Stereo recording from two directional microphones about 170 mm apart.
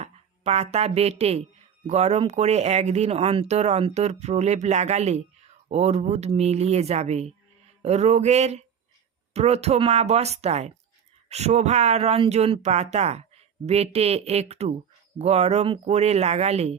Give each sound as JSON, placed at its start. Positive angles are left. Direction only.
{"t": 0.0, "sound": "speech", "side_deg": -40}